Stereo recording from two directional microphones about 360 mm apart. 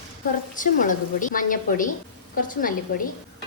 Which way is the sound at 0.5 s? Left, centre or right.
Left.